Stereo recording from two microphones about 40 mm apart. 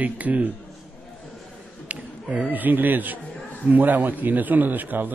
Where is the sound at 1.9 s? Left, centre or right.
Right.